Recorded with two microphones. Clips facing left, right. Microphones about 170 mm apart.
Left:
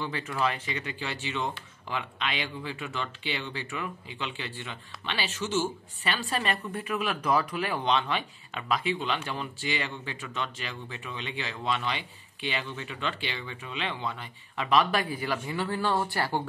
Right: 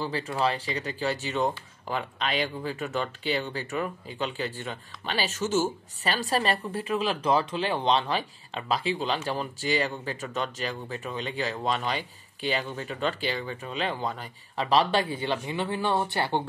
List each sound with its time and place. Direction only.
0.0 s speech: 35° right (ahead or behind)